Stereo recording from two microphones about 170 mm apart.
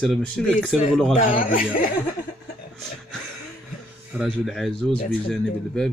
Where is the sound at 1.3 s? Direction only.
55° left (ahead or behind).